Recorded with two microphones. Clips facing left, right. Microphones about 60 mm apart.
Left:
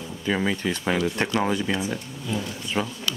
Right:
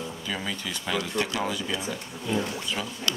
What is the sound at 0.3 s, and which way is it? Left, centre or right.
Speech, left.